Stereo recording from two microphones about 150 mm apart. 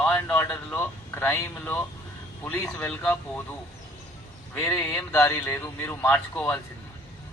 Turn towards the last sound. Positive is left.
turn(degrees=15)  # may be behind; listen again after turning